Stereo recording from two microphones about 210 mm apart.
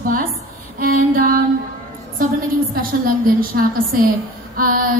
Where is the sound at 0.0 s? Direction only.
45° right (ahead or behind).